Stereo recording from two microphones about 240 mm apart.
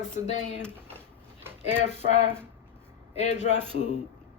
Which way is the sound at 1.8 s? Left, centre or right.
Left.